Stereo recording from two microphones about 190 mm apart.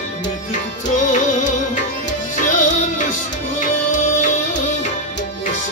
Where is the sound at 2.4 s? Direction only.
45° left (ahead or behind).